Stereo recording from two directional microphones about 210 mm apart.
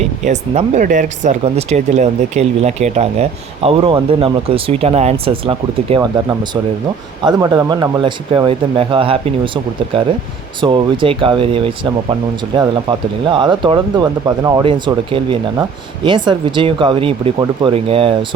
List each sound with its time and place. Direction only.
0.3 s speech: 35° right (ahead or behind)
7.3 s speech: 20° right (ahead or behind)
10.6 s speech: 25° right (ahead or behind)